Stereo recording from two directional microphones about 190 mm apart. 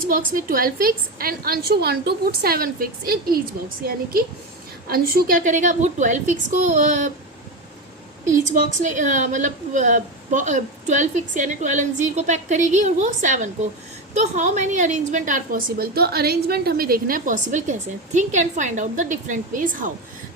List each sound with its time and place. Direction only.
0.1 s a woman's voice: 50° right (ahead or behind)
4.9 s a woman's voice: 50° right (ahead or behind)
8.8 s a woman's voice: 40° right (ahead or behind)